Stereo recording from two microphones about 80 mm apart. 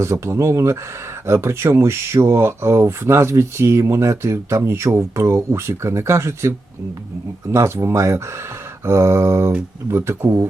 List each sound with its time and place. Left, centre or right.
0.0 s speech: right